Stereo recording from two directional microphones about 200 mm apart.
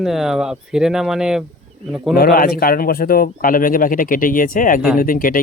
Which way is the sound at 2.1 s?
45° left (ahead or behind).